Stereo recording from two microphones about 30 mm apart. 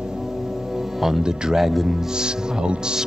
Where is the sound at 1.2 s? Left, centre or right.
Right.